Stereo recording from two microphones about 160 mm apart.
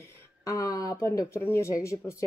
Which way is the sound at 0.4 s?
20° left (ahead or behind).